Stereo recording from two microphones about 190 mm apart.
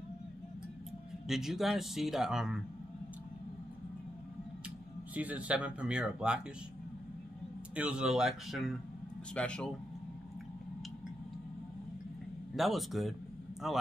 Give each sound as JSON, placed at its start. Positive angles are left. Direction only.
{"t": 1.2, "sound": "speech", "side_deg": 0}
{"t": 5.1, "sound": "speech", "side_deg": -10}
{"t": 7.7, "sound": "speech", "side_deg": -5}
{"t": 12.5, "sound": "speech", "side_deg": 0}